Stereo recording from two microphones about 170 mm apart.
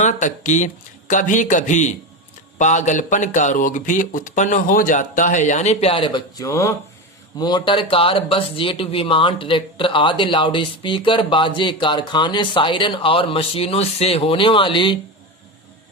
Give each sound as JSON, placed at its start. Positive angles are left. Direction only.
{"t": 0.0, "sound": "speech", "side_deg": 45}